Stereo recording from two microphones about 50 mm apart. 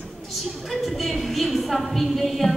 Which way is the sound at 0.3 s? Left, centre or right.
Centre.